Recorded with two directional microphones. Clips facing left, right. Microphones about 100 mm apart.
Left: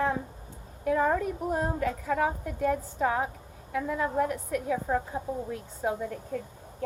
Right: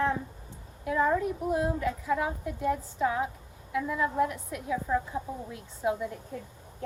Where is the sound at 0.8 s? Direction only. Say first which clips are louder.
Left 1 dB; 50° left (ahead or behind).